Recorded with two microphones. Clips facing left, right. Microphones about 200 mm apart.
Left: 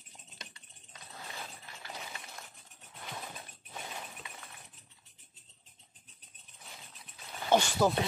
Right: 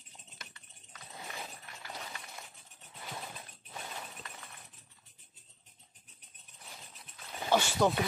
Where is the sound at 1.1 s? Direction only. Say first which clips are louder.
Right 1 dB; 10° right (ahead or behind).